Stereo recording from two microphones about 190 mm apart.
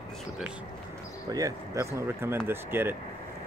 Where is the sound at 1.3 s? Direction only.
15° right (ahead or behind).